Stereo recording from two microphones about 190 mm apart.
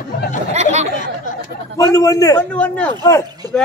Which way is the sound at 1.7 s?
20° left (ahead or behind).